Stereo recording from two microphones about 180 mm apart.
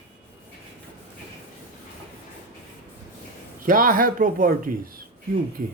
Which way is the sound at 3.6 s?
50° right (ahead or behind).